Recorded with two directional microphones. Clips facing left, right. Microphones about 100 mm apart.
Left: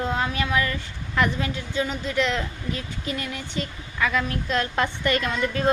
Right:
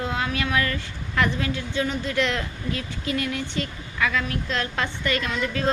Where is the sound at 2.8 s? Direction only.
20° left (ahead or behind).